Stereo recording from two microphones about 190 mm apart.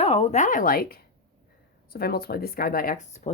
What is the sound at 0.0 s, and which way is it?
Speech, 30° left (ahead or behind).